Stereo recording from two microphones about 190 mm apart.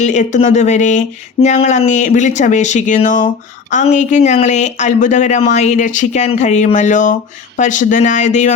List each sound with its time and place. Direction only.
0.0 s speech: 40° left (ahead or behind)